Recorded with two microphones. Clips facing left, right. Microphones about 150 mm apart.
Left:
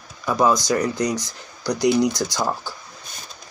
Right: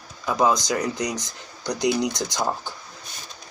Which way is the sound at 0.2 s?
20° right (ahead or behind).